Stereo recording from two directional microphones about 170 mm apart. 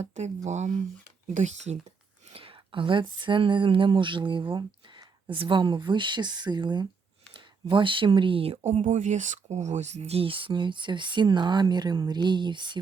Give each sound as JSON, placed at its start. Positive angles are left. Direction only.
{"t": 0.0, "sound": "speech", "side_deg": -40}
{"t": 2.3, "sound": "speech", "side_deg": -30}